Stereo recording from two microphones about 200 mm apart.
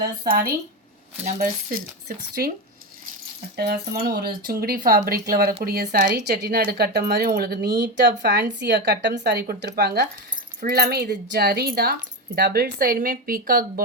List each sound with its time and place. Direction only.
1.2 s speech: 40° right (ahead or behind)
3.6 s a woman's voice: 50° right (ahead or behind)